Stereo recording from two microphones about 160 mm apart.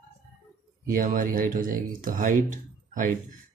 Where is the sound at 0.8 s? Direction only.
60° right (ahead or behind).